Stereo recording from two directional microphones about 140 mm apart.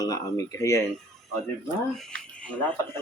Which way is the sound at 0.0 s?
25° left (ahead or behind).